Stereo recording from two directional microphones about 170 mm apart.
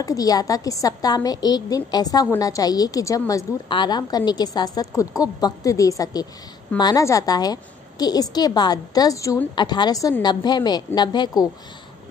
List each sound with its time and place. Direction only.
0.0 s a woman's voice: 20° left (ahead or behind)